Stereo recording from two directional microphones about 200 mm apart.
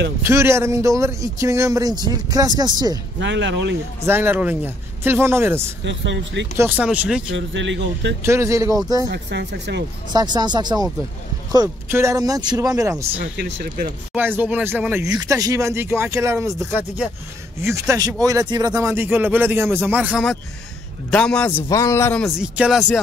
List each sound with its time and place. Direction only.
0.2 s speech: 15° right (ahead or behind)
3.2 s speech: 60° right (ahead or behind)
4.0 s speech: 10° right (ahead or behind)
5.9 s speech: 60° right (ahead or behind)
6.5 s speech: 10° right (ahead or behind)
7.3 s speech: 65° right (ahead or behind)
8.2 s speech: 15° right (ahead or behind)
9.1 s speech: 60° right (ahead or behind)
10.1 s speech: 20° right (ahead or behind)
13.2 s speech: 55° right (ahead or behind)
14.1 s speech: 10° right (ahead or behind)
21.5 s speech: 15° left (ahead or behind)
22.2 s speech: 5° right (ahead or behind)